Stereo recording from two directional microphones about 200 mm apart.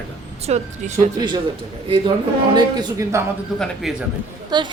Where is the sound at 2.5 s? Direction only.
20° right (ahead or behind).